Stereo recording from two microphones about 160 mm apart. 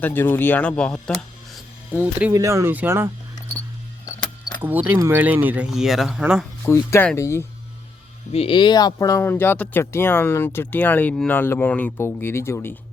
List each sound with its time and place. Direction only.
0.0 s speech: 15° left (ahead or behind)
0.8 s music: 5° left (ahead or behind)
2.0 s speech: 15° right (ahead or behind)
4.6 s speech: 10° right (ahead or behind)
6.7 s speech: 15° left (ahead or behind)
8.3 s speech: 35° left (ahead or behind); by 12.7 s 15° left (ahead or behind)